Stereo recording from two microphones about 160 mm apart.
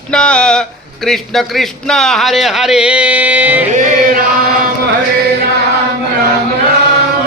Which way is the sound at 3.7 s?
60° right (ahead or behind).